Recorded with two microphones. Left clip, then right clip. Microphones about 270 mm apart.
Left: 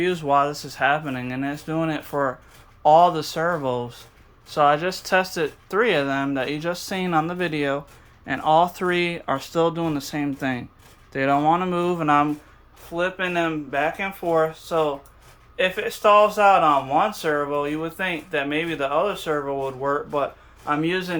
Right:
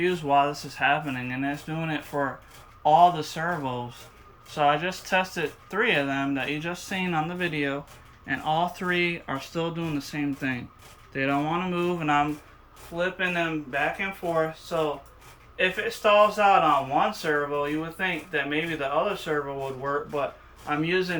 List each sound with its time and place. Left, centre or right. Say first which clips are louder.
0.0 s speech: left 2 dB; centre